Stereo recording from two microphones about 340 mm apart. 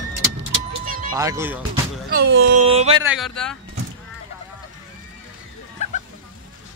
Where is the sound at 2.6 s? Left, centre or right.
Centre.